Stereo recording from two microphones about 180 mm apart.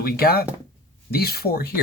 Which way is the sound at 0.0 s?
60° left (ahead or behind).